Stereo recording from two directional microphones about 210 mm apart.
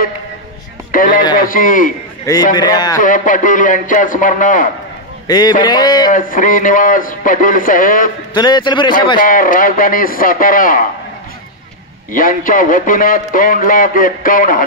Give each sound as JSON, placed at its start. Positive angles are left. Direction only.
{"t": 0.9, "sound": "a man's voice", "side_deg": 40}
{"t": 2.5, "sound": "speech", "side_deg": 20}
{"t": 3.0, "sound": "a man's voice", "side_deg": 40}
{"t": 5.2, "sound": "speech", "side_deg": 20}
{"t": 6.1, "sound": "a man's voice", "side_deg": 40}
{"t": 8.4, "sound": "speech", "side_deg": 20}
{"t": 9.2, "sound": "a man's voice", "side_deg": 40}
{"t": 12.1, "sound": "a man's voice", "side_deg": 40}